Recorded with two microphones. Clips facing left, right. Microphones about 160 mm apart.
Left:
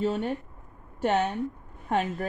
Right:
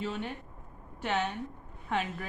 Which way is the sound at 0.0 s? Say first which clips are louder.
Left 8 dB; 40° left (ahead or behind).